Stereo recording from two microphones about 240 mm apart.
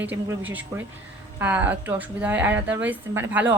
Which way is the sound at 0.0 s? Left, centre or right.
Centre.